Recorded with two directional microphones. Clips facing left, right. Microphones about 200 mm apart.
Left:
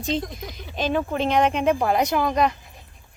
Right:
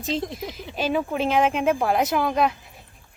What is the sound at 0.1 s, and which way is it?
Speech, centre (ahead or behind).